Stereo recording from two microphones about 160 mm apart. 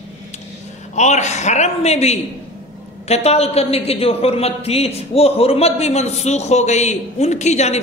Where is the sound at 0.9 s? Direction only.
45° left (ahead or behind).